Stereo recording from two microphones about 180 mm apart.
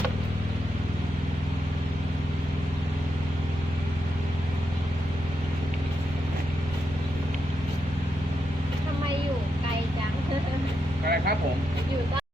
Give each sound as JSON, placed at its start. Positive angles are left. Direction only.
{"t": 11.0, "sound": "vehicle", "side_deg": -60}